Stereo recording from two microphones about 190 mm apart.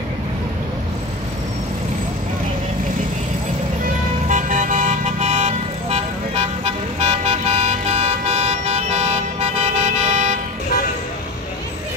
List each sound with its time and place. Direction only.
4.3 s vehicle: 40° right (ahead or behind)